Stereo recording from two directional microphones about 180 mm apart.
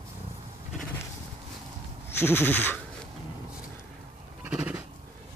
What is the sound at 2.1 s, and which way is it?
Goat, 10° left (ahead or behind).